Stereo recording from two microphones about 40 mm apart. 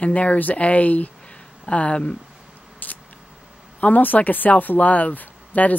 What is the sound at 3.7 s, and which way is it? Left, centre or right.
Speech, left.